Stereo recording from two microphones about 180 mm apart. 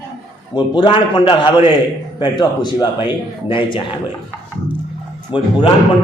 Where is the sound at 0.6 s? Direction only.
25° left (ahead or behind).